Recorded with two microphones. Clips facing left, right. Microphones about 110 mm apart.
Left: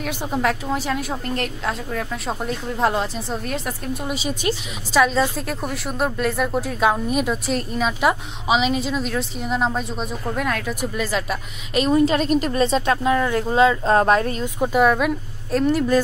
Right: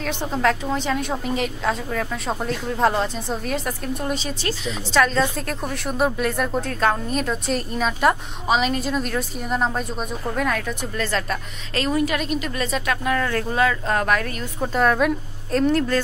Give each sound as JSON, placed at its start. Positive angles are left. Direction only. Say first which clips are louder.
{"t": 0.0, "sound": "a woman's voice", "louder": "right 1 dB", "side_deg": 10}
{"t": 11.8, "sound": "speech", "louder": "left 5 dB", "side_deg": 25}
{"t": 12.3, "sound": "a woman's voice", "louder": "left 6 dB", "side_deg": 45}
{"t": 12.5, "sound": "speech", "louder": "left 5 dB", "side_deg": 30}
{"t": 14.4, "sound": "a woman's voice", "louder": "left 3 dB", "side_deg": 10}